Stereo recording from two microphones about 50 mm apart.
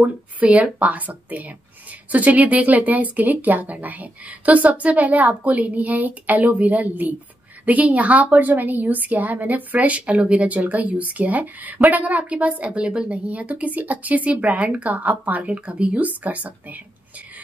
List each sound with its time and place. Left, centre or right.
0.0 s a woman's voice: right